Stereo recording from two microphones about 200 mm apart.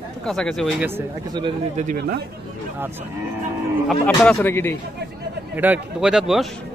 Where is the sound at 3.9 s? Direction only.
5° left (ahead or behind).